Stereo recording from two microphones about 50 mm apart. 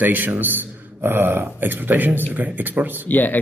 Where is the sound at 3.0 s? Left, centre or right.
Left.